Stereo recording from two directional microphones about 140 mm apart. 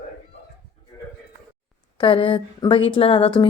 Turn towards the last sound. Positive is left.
turn(degrees=40)  # may be behind; listen again after turning